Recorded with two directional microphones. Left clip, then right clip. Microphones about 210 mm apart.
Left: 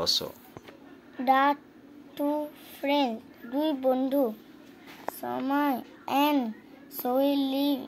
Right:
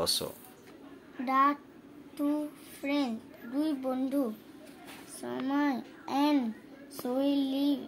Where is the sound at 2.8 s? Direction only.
45° left (ahead or behind).